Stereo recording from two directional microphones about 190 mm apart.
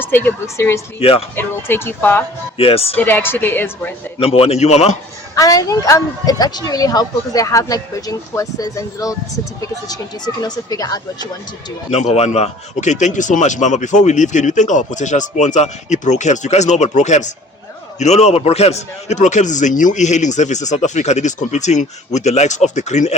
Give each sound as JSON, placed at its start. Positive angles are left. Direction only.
{"t": 0.0, "sound": "a woman's voice", "side_deg": 10}
{"t": 0.9, "sound": "speech", "side_deg": 30}
{"t": 1.4, "sound": "a woman's voice", "side_deg": 10}
{"t": 2.6, "sound": "speech", "side_deg": 30}
{"t": 2.9, "sound": "a woman's voice", "side_deg": 10}
{"t": 4.2, "sound": "speech", "side_deg": 30}
{"t": 5.3, "sound": "a woman's voice", "side_deg": 20}
{"t": 11.9, "sound": "speech", "side_deg": 35}